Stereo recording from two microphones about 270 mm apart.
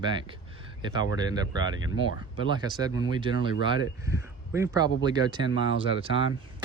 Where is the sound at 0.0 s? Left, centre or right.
Centre.